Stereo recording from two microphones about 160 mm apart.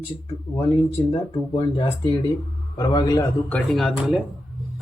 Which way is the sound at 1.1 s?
30° left (ahead or behind).